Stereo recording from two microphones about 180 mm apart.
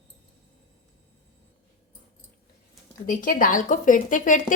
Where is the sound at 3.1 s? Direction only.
50° left (ahead or behind).